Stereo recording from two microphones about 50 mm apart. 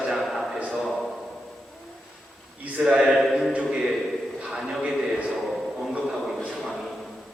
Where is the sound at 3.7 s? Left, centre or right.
Centre.